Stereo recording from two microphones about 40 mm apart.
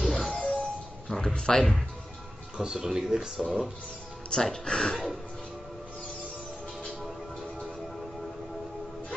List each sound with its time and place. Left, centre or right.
0.0 s music: centre
1.2 s speech: centre
1.6 s speech: centre
2.5 s speech: centre
4.3 s speech: centre
4.9 s speech: centre
6.8 s music: centre